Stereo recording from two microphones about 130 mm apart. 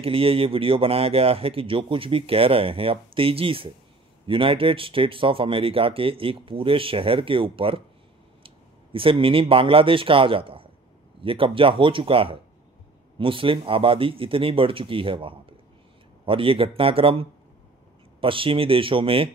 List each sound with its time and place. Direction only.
0.0 s speech: 45° right (ahead or behind)